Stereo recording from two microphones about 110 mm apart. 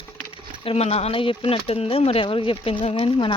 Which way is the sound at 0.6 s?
65° left (ahead or behind).